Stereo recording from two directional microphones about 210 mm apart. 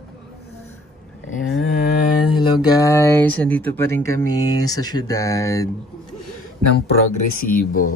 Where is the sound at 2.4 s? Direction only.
15° left (ahead or behind).